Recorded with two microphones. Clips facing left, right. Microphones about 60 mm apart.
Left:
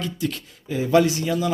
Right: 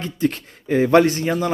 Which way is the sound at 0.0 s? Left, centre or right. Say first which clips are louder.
Right 5 dB; right.